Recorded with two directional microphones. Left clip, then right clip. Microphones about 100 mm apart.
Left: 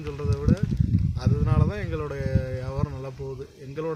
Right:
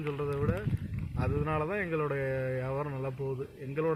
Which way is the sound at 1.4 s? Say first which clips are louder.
Even; 20° left (ahead or behind).